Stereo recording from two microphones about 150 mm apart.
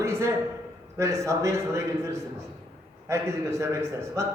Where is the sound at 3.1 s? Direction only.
20° right (ahead or behind).